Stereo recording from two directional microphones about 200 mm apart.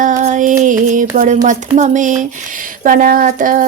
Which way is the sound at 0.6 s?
40° right (ahead or behind).